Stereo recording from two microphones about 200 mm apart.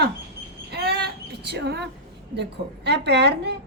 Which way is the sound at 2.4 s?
55° right (ahead or behind).